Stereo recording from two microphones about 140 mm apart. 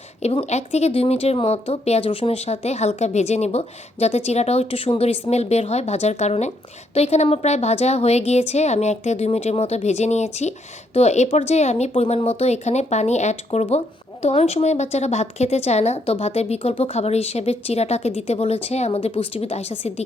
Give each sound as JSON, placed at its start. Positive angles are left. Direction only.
{"t": 0.2, "sound": "speech", "side_deg": 50}